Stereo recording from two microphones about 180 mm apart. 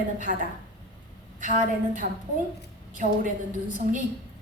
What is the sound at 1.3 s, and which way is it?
A woman's voice, 45° right (ahead or behind).